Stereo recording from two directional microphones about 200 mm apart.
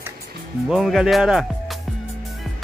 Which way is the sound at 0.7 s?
Centre (ahead or behind).